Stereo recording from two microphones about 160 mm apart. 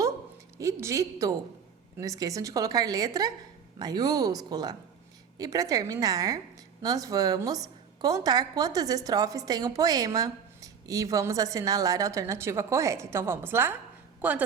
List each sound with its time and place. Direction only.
0.6 s a woman's voice: 20° right (ahead or behind)